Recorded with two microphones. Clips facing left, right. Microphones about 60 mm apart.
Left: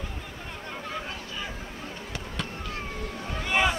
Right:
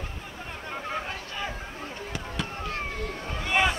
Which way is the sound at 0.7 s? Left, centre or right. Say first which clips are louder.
Right 3 dB; right.